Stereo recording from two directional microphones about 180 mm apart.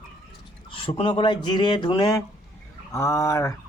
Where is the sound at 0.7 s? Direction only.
30° left (ahead or behind).